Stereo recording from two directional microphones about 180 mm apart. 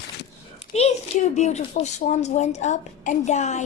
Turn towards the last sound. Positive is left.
turn(degrees=40)  # may be behind; listen again after turning